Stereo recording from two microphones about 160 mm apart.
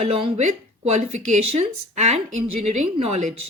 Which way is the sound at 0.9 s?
45° right (ahead or behind).